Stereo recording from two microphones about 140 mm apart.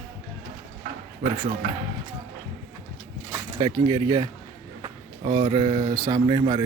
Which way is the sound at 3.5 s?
30° right (ahead or behind).